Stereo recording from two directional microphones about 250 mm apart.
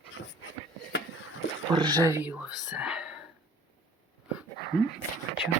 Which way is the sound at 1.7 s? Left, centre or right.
Centre.